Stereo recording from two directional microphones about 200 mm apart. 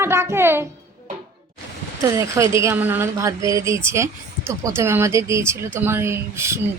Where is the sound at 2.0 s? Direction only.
15° right (ahead or behind).